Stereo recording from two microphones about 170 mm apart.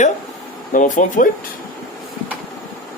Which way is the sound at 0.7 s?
50° left (ahead or behind).